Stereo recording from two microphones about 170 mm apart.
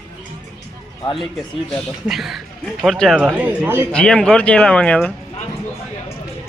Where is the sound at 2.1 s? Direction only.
Centre (ahead or behind).